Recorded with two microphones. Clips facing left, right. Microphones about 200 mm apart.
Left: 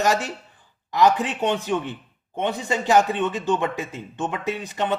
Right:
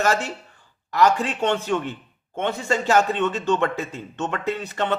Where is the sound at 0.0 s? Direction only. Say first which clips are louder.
Even; 15° left (ahead or behind).